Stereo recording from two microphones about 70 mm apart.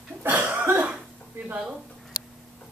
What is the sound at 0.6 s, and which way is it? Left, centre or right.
Cough, right.